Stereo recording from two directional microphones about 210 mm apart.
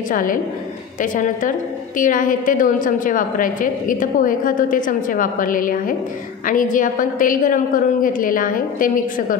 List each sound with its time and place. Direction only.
0.1 s a woman's voice: 40° left (ahead or behind)